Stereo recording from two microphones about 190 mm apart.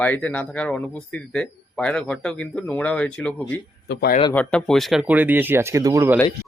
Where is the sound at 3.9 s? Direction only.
60° left (ahead or behind).